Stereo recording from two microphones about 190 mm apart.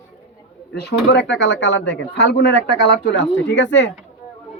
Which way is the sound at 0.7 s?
60° left (ahead or behind).